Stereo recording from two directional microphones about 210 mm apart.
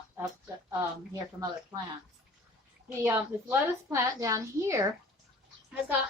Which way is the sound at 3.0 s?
10° right (ahead or behind).